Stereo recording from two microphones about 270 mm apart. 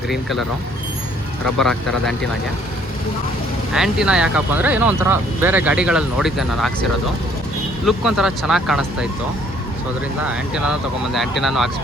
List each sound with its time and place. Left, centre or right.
0.1 s speech: centre
1.5 s speech: centre
3.8 s speech: centre
7.9 s speech: centre
10.2 s speech: centre